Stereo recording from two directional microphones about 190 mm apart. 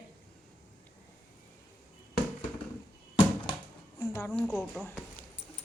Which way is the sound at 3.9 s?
15° left (ahead or behind).